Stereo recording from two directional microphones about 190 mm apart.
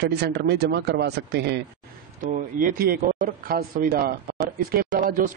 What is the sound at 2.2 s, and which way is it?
Speech, 45° right (ahead or behind).